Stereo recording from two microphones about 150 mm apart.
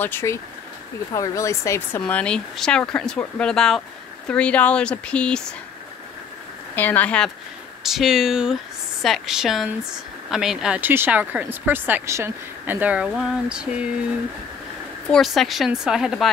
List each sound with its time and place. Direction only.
0.0 s a woman's voice: 15° left (ahead or behind)
6.7 s speech: 10° left (ahead or behind)
7.8 s a woman's voice: centre (ahead or behind)
15.0 s a woman's voice: centre (ahead or behind)